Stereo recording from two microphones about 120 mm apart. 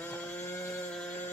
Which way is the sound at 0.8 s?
5° left (ahead or behind).